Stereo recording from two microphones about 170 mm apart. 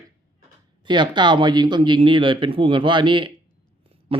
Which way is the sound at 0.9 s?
25° right (ahead or behind).